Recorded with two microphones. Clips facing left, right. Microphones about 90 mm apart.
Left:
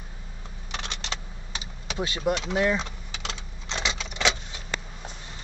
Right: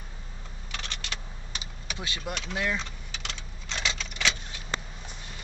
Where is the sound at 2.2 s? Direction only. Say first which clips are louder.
Left 8 dB; 15° left (ahead or behind).